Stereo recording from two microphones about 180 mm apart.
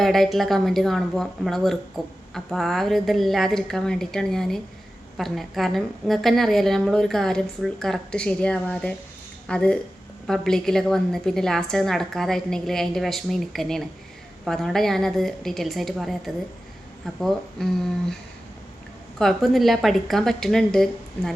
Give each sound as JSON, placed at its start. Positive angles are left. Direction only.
{"t": 0.0, "sound": "a woman's voice", "side_deg": 0}
{"t": 19.2, "sound": "a woman's voice", "side_deg": 0}